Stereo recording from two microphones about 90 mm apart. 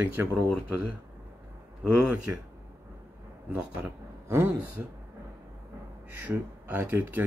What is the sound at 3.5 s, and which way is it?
Speech, 15° right (ahead or behind).